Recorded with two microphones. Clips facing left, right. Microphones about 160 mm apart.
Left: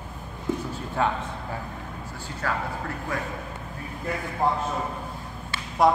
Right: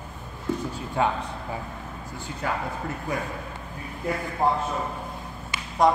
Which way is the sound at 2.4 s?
15° right (ahead or behind).